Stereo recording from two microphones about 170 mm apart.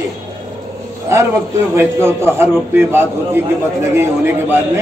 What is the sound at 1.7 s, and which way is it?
A man's voice, 15° right (ahead or behind).